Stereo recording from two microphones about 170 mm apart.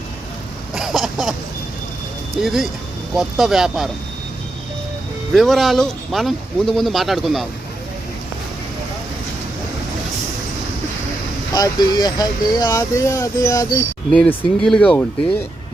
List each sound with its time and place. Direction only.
0.7 s throat clearing: centre (ahead or behind)
2.4 s speech: centre (ahead or behind)
5.3 s speech: centre (ahead or behind)
11.5 s speech: 25° left (ahead or behind)
14.1 s speech: 5° left (ahead or behind)